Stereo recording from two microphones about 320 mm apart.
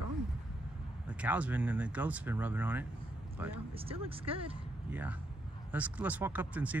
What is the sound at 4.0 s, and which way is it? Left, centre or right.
Speech, centre.